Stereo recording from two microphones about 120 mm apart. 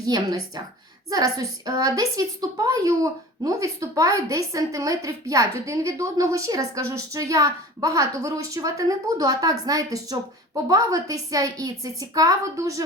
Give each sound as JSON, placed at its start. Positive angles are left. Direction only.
{"t": 0.0, "sound": "a woman's voice", "side_deg": -30}